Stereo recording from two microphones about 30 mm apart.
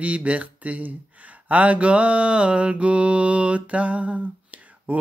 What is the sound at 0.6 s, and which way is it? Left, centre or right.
Speech, right.